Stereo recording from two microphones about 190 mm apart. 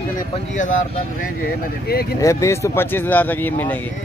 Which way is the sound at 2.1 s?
15° left (ahead or behind).